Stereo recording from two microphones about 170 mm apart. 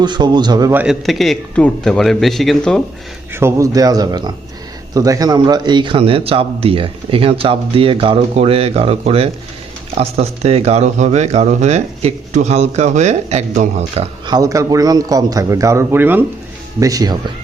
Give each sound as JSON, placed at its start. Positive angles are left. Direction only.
{"t": 0.0, "sound": "speech", "side_deg": -25}
{"t": 0.7, "sound": "a man's voice", "side_deg": -5}
{"t": 3.3, "sound": "a man's voice", "side_deg": -15}
{"t": 14.3, "sound": "speech", "side_deg": -20}